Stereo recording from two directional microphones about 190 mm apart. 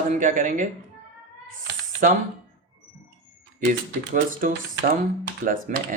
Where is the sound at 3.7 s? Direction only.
45° right (ahead or behind).